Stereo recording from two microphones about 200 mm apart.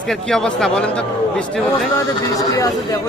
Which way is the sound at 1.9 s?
15° left (ahead or behind).